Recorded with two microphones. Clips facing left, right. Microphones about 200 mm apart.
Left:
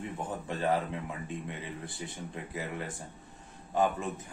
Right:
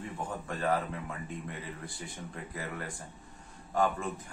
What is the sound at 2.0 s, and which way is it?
Speech, 25° left (ahead or behind).